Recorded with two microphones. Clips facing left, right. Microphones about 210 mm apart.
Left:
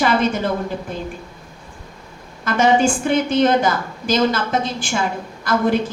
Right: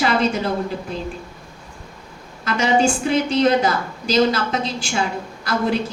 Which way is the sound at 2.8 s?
50° left (ahead or behind).